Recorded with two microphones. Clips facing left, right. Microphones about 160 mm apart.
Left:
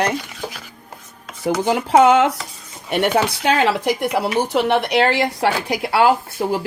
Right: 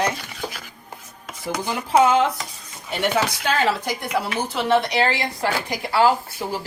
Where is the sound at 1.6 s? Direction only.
70° left (ahead or behind).